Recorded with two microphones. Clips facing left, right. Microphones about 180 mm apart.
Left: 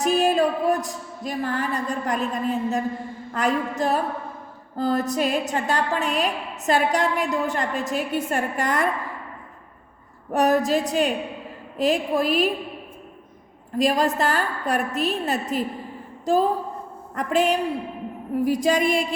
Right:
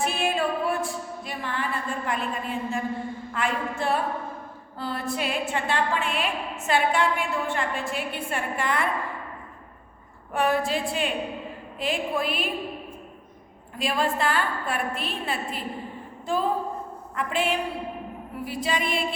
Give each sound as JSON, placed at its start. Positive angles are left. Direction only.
{"t": 0.0, "sound": "a sound", "side_deg": 40}
{"t": 3.3, "sound": "a woman's voice", "side_deg": 40}
{"t": 10.3, "sound": "a woman's voice", "side_deg": 40}
{"t": 13.7, "sound": "a woman's voice", "side_deg": 40}
{"t": 18.3, "sound": "music", "side_deg": 45}